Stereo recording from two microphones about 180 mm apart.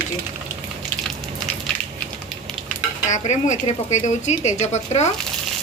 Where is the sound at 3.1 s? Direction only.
40° left (ahead or behind).